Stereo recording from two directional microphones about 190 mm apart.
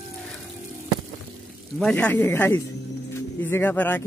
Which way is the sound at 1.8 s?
5° left (ahead or behind).